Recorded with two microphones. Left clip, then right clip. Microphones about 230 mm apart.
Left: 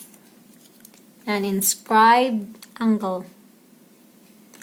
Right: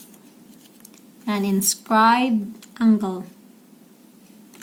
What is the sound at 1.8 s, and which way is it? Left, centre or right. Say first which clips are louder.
A woman's voice: left 2 dB; left.